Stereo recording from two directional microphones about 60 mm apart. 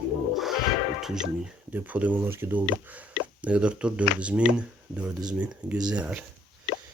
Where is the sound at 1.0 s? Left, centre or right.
Centre.